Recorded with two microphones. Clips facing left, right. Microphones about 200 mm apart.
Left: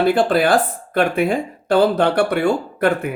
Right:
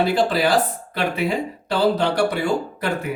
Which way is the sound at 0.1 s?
55° left (ahead or behind).